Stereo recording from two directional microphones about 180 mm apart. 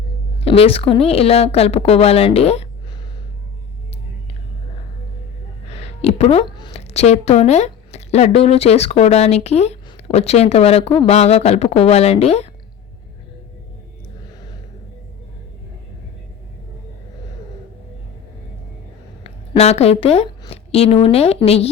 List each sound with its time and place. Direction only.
0.3 s a woman's voice: 35° left (ahead or behind)
6.0 s a woman's voice: 35° left (ahead or behind)
19.2 s speech: 35° left (ahead or behind)